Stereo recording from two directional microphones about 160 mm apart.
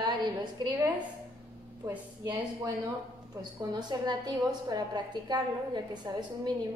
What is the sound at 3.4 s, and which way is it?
A woman's voice, 25° right (ahead or behind).